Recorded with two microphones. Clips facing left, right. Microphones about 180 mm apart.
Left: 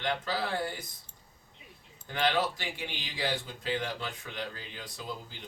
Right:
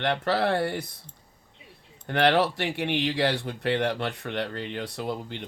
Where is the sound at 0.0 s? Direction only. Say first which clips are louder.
Right 8 dB; 70° right (ahead or behind).